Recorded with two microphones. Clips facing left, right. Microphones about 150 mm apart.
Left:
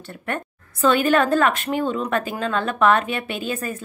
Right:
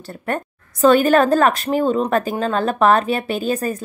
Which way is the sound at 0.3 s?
40° right (ahead or behind).